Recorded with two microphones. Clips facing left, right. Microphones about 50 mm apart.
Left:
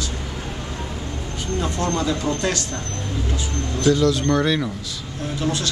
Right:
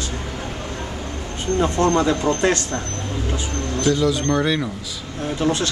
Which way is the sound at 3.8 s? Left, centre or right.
Centre.